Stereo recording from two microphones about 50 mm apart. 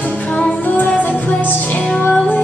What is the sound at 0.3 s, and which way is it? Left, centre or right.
Music, left.